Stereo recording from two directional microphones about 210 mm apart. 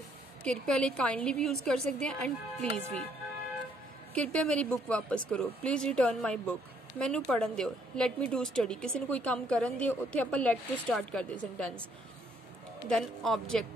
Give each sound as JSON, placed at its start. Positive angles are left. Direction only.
{"t": 0.4, "sound": "a woman's voice", "side_deg": 5}
{"t": 4.1, "sound": "a woman's voice", "side_deg": 5}
{"t": 12.8, "sound": "a woman's voice", "side_deg": 0}